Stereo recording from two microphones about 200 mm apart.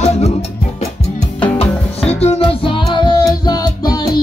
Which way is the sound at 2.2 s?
30° left (ahead or behind).